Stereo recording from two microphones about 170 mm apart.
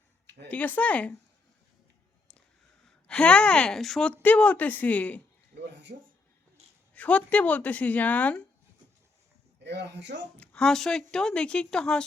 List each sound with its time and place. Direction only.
0.4 s a woman's voice: 10° left (ahead or behind)
3.1 s a woman's voice: 5° left (ahead or behind)
5.9 s speech: 55° right (ahead or behind)
6.9 s a woman's voice: 10° left (ahead or behind)
9.6 s speech: 85° right
10.3 s speech: 10° left (ahead or behind)